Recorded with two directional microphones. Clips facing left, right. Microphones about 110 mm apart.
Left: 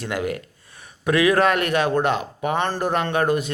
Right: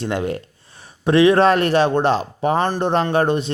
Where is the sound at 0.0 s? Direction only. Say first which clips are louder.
Right 3 dB; 30° right (ahead or behind).